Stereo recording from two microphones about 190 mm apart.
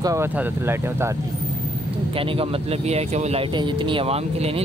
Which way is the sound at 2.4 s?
35° right (ahead or behind).